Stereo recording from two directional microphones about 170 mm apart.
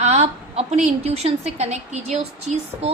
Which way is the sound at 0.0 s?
40° right (ahead or behind).